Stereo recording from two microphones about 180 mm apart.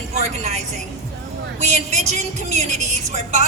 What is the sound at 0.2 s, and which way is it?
A woman's voice, 35° right (ahead or behind).